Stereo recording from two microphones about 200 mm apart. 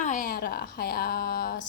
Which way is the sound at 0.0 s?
40° left (ahead or behind).